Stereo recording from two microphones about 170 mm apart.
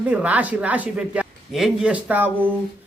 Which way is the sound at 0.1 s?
10° right (ahead or behind).